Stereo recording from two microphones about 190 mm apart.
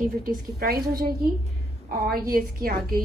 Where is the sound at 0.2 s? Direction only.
50° right (ahead or behind).